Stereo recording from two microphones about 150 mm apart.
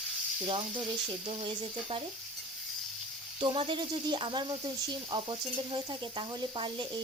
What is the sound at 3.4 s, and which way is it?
Speech, 35° right (ahead or behind).